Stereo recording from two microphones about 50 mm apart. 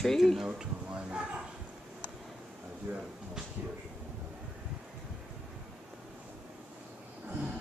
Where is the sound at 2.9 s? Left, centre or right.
Right.